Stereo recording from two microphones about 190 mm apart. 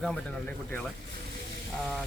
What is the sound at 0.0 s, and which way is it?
Speech, 5° left (ahead or behind).